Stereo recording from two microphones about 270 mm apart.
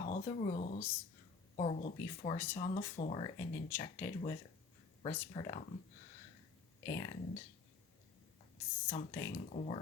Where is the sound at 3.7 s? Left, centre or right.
Centre.